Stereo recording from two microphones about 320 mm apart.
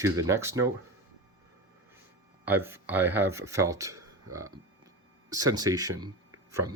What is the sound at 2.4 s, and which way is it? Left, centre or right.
Speech, centre.